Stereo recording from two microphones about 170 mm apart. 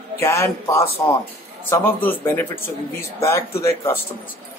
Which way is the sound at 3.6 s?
15° left (ahead or behind).